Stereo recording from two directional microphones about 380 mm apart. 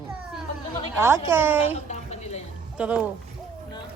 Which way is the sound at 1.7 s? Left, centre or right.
Centre.